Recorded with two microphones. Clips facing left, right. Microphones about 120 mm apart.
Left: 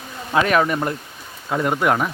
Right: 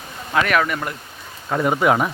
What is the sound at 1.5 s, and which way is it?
Speech, centre (ahead or behind).